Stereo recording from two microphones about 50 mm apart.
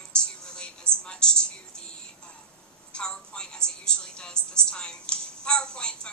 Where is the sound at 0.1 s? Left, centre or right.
Centre.